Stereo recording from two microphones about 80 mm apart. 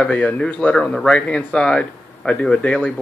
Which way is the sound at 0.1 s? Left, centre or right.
Centre.